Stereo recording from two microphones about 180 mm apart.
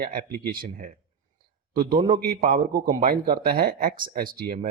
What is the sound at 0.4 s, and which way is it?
A man's voice, 50° right (ahead or behind).